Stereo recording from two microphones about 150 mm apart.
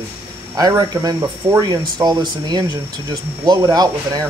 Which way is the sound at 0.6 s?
25° right (ahead or behind).